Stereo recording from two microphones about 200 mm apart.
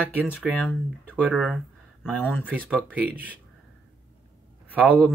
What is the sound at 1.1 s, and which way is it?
Speech, 5° right (ahead or behind).